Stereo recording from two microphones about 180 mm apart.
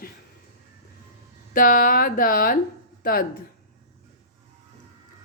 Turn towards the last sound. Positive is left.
turn(degrees=50)  # may be behind; listen again after turning